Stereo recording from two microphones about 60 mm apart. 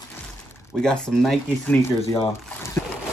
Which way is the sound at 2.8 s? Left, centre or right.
Left.